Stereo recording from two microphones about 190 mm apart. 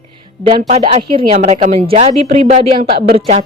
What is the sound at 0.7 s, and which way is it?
A woman's voice, 35° right (ahead or behind).